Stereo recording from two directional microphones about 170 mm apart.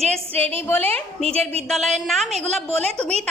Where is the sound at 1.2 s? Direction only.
35° right (ahead or behind).